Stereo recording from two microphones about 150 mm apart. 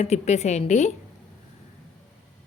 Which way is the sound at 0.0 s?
45° left (ahead or behind).